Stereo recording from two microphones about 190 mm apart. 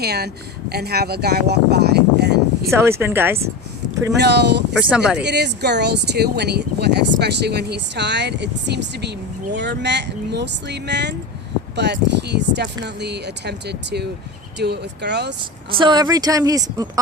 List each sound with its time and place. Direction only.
0.0 s speech: 60° right (ahead or behind)
2.6 s speech: 15° right (ahead or behind)
4.2 s speech: 60° right (ahead or behind)
4.8 s speech: 5° right (ahead or behind)
5.2 s speech: 60° right (ahead or behind)
15.8 s speech: 20° right (ahead or behind)